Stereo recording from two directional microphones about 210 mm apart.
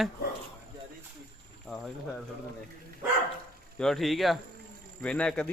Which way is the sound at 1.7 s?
Centre (ahead or behind).